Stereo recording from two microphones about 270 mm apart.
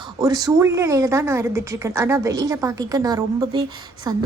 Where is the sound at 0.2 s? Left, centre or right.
Centre.